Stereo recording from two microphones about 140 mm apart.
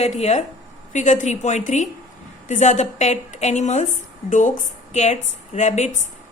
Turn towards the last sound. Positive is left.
turn(degrees=55)  # may be behind; listen again after turning